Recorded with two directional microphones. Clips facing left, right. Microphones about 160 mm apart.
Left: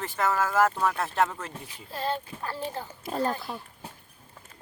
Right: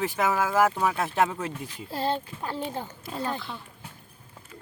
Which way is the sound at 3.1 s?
40° left (ahead or behind).